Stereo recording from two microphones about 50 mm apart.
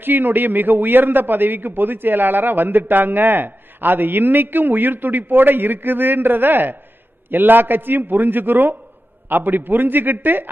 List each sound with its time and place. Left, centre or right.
0.0 s a man's voice: right